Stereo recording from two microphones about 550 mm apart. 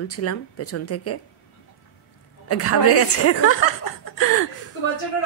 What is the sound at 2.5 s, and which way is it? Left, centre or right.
A woman's voice, left.